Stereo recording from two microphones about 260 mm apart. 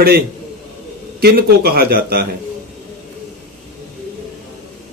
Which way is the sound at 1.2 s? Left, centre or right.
Right.